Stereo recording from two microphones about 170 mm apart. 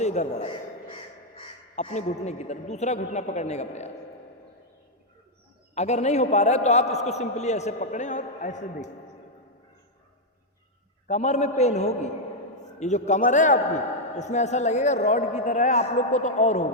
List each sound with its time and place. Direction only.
0.0 s a sound: 40° left (ahead or behind)
1.7 s a man's voice: 40° left (ahead or behind)
5.7 s a man's voice: 40° left (ahead or behind)
11.1 s a man's voice: 45° left (ahead or behind)